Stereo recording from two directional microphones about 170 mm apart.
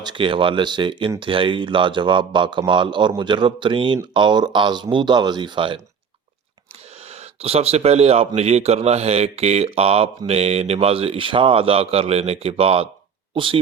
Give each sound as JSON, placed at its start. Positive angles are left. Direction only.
{"t": 0.0, "sound": "a man's voice", "side_deg": -30}
{"t": 7.1, "sound": "speech", "side_deg": -35}